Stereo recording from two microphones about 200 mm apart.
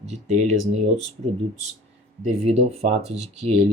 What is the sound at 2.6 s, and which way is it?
Speech, 30° right (ahead or behind).